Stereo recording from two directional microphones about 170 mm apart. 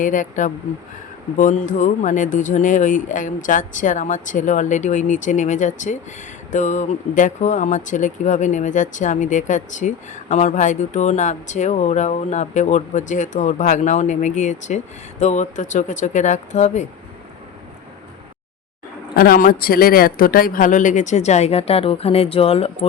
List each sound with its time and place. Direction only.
0.0 s speech: 50° left (ahead or behind)
19.1 s speech: 60° left (ahead or behind); by 22.9 s 35° left (ahead or behind)